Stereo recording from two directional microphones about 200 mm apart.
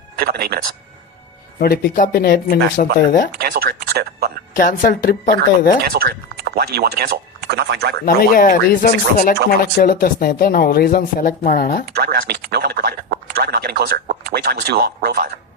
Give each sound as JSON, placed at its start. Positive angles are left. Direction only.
{"t": 0.2, "sound": "speech", "side_deg": -45}
{"t": 1.5, "sound": "speech", "side_deg": 50}
{"t": 3.3, "sound": "speech", "side_deg": -50}
{"t": 4.5, "sound": "speech", "side_deg": 45}
{"t": 5.8, "sound": "speech", "side_deg": -50}
{"t": 8.0, "sound": "speech", "side_deg": 45}
{"t": 11.9, "sound": "speech", "side_deg": -50}